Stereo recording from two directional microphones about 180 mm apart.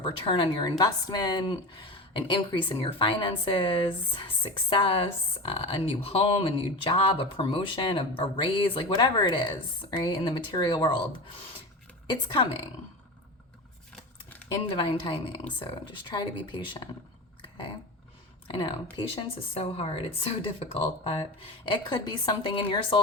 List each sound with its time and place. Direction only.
0.0 s a woman's voice: 25° left (ahead or behind)
14.5 s a woman's voice: 25° left (ahead or behind)
18.4 s a woman's voice: 25° left (ahead or behind)